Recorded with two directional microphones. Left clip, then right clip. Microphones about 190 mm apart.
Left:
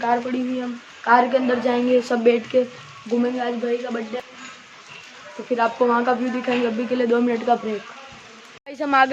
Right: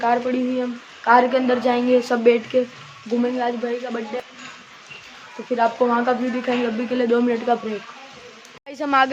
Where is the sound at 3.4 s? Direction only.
Centre (ahead or behind).